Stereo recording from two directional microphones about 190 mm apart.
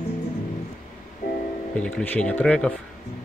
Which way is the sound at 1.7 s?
5° left (ahead or behind).